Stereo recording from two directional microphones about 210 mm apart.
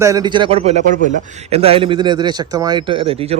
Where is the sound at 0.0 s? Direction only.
15° right (ahead or behind).